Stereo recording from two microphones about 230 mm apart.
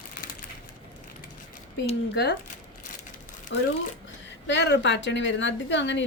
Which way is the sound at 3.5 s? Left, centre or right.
Left.